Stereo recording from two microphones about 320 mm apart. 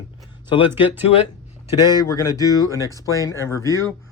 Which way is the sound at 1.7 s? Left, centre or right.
Centre.